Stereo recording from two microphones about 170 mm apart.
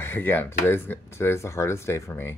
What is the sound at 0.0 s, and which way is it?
Speech, 15° left (ahead or behind).